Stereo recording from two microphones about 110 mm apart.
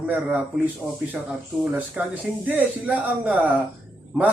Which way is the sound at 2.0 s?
15° right (ahead or behind).